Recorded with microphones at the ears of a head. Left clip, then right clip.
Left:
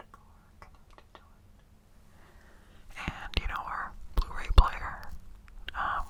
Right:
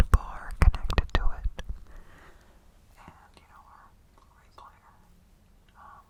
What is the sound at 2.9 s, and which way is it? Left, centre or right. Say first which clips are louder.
Whispering: left 16 dB; left.